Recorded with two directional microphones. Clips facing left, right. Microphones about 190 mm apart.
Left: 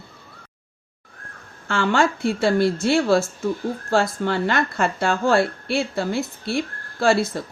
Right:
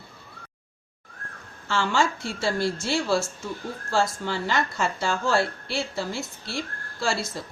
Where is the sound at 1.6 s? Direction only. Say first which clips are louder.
Left 4 dB; 55° left (ahead or behind).